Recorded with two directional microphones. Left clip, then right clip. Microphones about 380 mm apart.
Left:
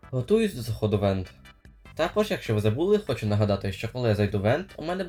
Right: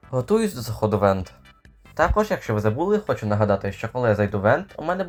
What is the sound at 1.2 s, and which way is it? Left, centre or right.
Music, centre.